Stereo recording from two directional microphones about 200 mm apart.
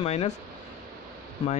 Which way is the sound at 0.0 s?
30° left (ahead or behind).